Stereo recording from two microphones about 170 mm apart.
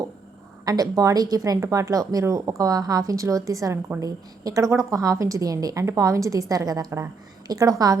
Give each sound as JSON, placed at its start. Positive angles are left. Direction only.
{"t": 0.6, "sound": "speech", "side_deg": -20}